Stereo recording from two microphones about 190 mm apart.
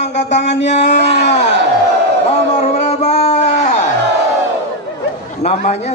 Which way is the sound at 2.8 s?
35° left (ahead or behind).